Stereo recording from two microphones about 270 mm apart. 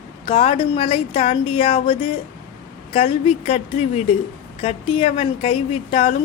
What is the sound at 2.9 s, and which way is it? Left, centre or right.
Speech, left.